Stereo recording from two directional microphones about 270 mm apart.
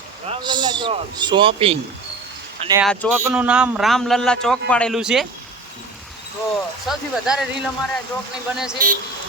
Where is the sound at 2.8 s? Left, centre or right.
Centre.